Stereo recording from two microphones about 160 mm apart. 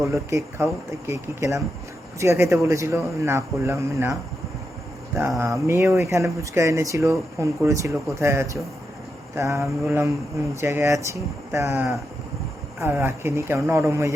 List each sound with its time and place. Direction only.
0.0 s speech: 20° right (ahead or behind)